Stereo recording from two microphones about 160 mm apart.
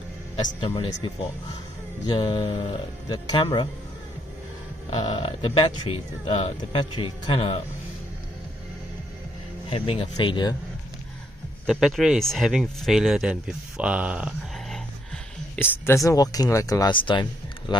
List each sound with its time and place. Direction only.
0.6 s speech: 25° left (ahead or behind)
4.9 s speech: 30° left (ahead or behind)
9.7 s speech: 35° left (ahead or behind)
11.6 s speech: centre (ahead or behind)
15.5 s speech: 15° left (ahead or behind); by 17.7 s 30° left (ahead or behind)